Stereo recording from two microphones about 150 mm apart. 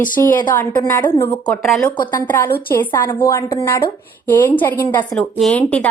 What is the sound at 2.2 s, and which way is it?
Speech, 15° left (ahead or behind).